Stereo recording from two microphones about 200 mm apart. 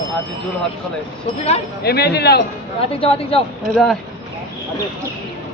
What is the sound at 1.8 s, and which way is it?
Speech, 55° left (ahead or behind).